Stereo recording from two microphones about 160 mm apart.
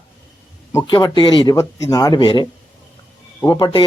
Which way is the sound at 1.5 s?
20° left (ahead or behind).